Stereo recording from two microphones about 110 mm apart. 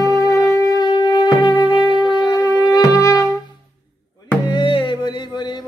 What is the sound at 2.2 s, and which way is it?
Music, 35° left (ahead or behind).